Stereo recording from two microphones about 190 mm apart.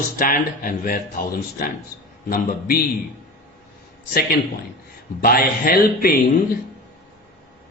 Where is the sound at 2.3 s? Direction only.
50° left (ahead or behind).